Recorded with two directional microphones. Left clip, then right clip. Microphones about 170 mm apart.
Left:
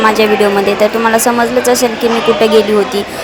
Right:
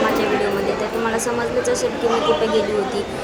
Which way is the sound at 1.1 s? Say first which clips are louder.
Left 11 dB; 50° left (ahead or behind).